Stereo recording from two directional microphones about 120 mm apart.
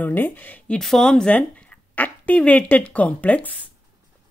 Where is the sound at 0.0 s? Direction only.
15° left (ahead or behind).